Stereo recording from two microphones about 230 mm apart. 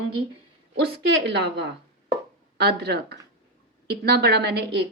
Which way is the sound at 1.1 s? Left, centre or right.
Right.